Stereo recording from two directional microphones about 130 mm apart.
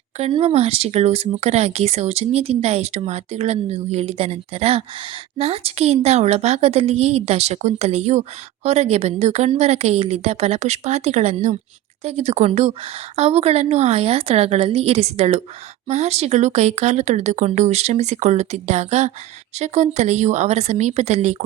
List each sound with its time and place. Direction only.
0.2 s a woman's voice: 50° right (ahead or behind)